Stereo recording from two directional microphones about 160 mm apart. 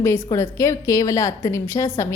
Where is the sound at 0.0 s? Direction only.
15° left (ahead or behind).